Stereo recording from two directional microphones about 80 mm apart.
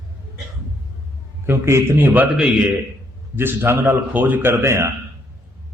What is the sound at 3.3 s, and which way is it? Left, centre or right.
A man's voice, right.